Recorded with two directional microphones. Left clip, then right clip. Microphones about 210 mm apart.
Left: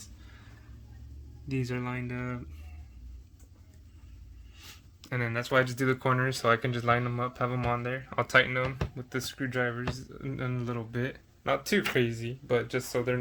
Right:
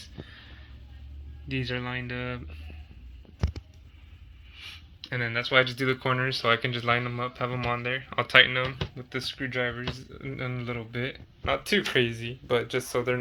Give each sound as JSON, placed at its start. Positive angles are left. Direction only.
{"t": 1.6, "sound": "speech", "side_deg": 0}
{"t": 5.0, "sound": "speech", "side_deg": 15}
{"t": 9.0, "sound": "speech", "side_deg": 20}